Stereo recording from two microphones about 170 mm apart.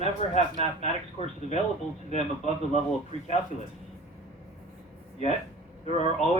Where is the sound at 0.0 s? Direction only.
40° left (ahead or behind).